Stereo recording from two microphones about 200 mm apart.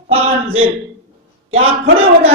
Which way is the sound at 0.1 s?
30° right (ahead or behind).